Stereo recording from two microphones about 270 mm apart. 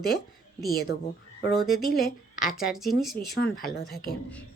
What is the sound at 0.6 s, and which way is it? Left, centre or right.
Speech, left.